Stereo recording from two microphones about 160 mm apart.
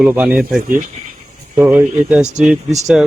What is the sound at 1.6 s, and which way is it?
Speech, 5° right (ahead or behind).